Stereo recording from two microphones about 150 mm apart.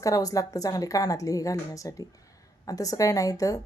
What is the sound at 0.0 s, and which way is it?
Speech, 25° left (ahead or behind).